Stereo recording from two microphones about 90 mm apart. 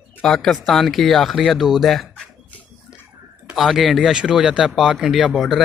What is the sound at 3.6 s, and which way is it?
Speech, centre (ahead or behind).